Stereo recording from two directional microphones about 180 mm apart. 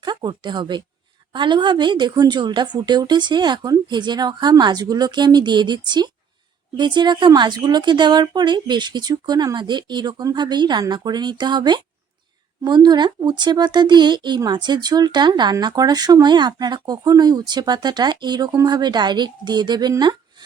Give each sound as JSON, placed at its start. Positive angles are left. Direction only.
{"t": 0.0, "sound": "a woman's voice", "side_deg": -25}